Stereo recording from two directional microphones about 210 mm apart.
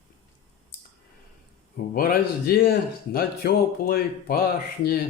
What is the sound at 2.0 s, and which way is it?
Speech, 45° left (ahead or behind).